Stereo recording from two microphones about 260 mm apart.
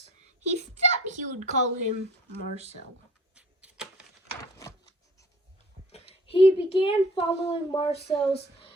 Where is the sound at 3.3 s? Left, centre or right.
Centre.